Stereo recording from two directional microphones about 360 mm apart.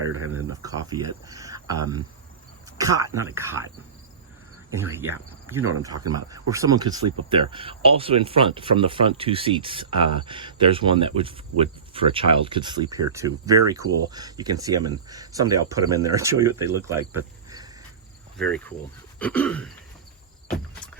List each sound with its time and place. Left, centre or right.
0.1 s speech: right
0.5 s speech: centre
4.8 s speech: centre
18.3 s a sound: centre